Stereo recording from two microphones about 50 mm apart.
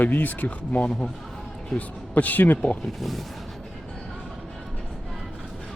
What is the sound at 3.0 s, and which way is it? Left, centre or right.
Speech, centre.